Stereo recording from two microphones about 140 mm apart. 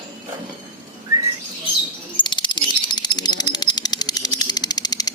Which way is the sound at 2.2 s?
35° left (ahead or behind).